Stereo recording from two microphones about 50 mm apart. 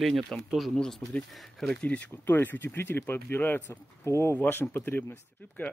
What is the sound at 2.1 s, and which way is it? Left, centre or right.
Speech, left.